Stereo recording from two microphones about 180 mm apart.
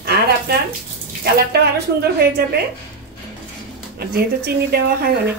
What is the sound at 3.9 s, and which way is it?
Speech, 60° right (ahead or behind).